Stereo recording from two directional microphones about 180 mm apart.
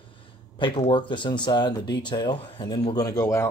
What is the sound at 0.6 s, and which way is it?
Speech, 30° left (ahead or behind).